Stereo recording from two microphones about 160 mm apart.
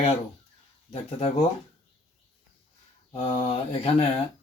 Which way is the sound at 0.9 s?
40° left (ahead or behind).